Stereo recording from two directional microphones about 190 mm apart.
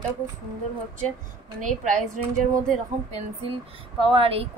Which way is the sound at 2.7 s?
35° right (ahead or behind).